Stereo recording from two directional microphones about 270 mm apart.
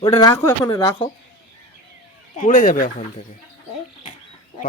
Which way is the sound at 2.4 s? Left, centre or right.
Left.